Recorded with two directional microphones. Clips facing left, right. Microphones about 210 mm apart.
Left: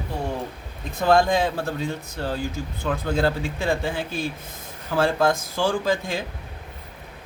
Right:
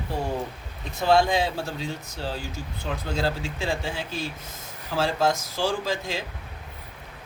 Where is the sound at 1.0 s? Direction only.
50° left (ahead or behind).